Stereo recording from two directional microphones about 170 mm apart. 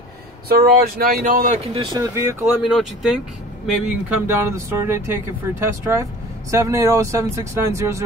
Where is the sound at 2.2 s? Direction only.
15° right (ahead or behind).